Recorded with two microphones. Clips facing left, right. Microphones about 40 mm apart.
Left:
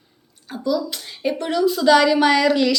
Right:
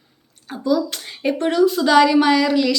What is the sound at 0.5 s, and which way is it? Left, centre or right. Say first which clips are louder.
A woman's voice: right 3 dB; right.